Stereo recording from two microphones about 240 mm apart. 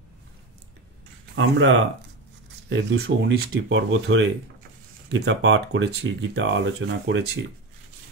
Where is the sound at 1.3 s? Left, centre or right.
Right.